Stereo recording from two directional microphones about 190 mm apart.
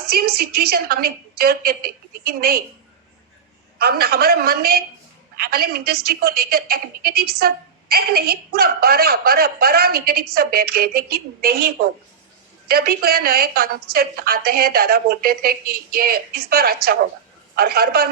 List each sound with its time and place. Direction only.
0.1 s a woman's voice: 55° right (ahead or behind)
3.8 s a woman's voice: 55° right (ahead or behind)